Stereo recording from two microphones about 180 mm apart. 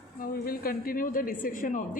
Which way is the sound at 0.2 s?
55° left (ahead or behind).